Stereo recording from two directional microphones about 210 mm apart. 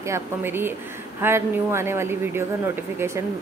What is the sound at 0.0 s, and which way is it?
Speech, 10° right (ahead or behind).